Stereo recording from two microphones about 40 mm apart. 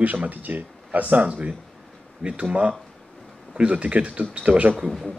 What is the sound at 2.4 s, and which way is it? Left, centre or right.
Speech, right.